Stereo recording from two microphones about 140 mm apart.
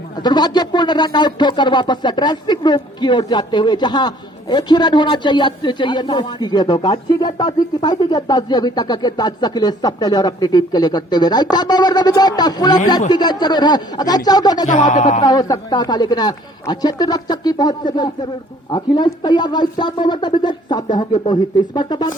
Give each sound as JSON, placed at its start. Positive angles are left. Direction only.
{"t": 0.2, "sound": "speech", "side_deg": 30}
{"t": 14.7, "sound": "speech", "side_deg": 60}
{"t": 15.2, "sound": "speech", "side_deg": 30}